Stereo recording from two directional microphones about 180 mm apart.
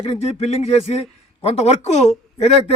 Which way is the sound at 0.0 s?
35° left (ahead or behind).